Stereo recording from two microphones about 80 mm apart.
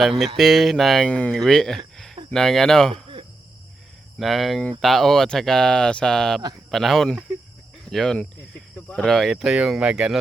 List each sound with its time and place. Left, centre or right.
0.0 s speech: centre
1.0 s speech: centre
1.4 s speech: centre
4.2 s speech: centre